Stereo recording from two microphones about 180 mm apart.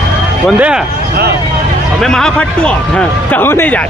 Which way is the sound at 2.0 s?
5° left (ahead or behind).